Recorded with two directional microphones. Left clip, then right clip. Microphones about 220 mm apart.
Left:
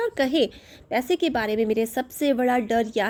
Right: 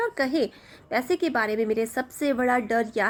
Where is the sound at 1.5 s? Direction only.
50° left (ahead or behind).